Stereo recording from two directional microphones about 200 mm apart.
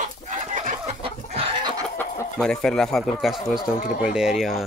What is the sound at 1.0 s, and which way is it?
Chicken, 25° right (ahead or behind).